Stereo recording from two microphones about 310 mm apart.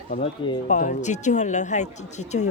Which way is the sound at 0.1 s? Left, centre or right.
Centre.